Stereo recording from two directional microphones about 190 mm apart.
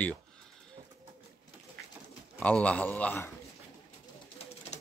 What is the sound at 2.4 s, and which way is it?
Speech, 5° left (ahead or behind).